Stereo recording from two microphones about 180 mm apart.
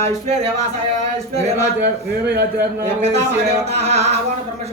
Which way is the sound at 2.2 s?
60° right (ahead or behind).